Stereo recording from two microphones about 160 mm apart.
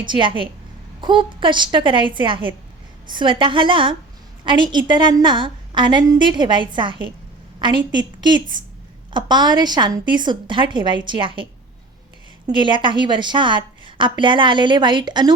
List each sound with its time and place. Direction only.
0.0 s a woman's voice: 30° right (ahead or behind)
12.5 s a woman's voice: 30° right (ahead or behind)